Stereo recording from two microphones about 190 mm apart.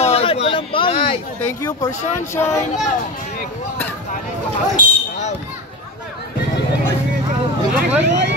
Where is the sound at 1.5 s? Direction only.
15° left (ahead or behind).